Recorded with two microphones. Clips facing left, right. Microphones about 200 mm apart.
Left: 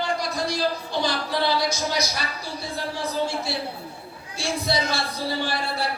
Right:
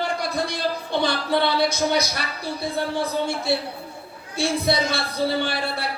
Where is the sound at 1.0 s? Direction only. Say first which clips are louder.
Right 3 dB; 60° right (ahead or behind).